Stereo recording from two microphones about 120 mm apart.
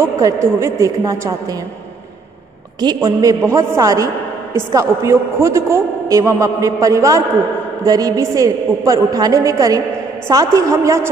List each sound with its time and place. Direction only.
0.0 s a woman's voice: 25° right (ahead or behind)
2.8 s a woman's voice: 35° right (ahead or behind)